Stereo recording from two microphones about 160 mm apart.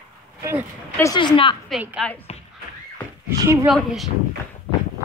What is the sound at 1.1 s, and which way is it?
Speech, 30° left (ahead or behind).